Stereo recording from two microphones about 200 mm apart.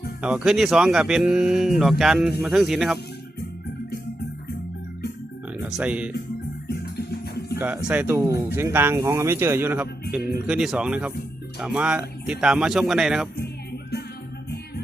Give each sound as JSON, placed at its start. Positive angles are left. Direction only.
{"t": 0.2, "sound": "speech", "side_deg": -5}
{"t": 5.6, "sound": "speech", "side_deg": -5}
{"t": 6.7, "sound": "music", "side_deg": 50}
{"t": 7.9, "sound": "speech", "side_deg": -10}